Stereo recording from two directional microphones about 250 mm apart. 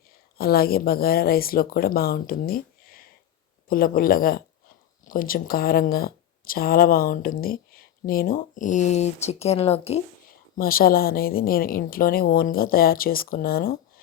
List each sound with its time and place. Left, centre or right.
0.3 s speech: left
10.6 s speech: left